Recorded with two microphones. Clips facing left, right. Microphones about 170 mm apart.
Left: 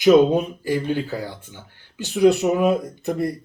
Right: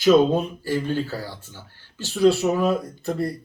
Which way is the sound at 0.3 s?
15° left (ahead or behind).